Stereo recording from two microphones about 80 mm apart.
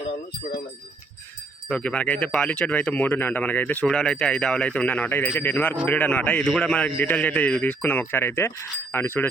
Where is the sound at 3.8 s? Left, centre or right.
Centre; by 9.2 s left.